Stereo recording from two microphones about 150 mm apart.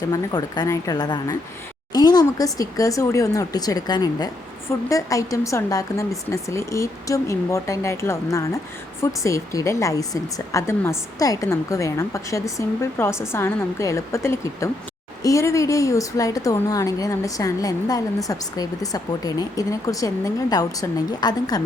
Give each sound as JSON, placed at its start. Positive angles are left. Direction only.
{"t": 0.1, "sound": "speech", "side_deg": 25}